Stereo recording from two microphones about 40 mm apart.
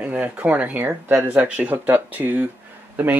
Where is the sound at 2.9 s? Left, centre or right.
Right.